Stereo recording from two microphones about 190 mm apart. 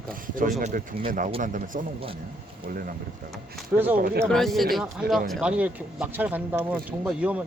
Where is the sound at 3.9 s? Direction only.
50° right (ahead or behind).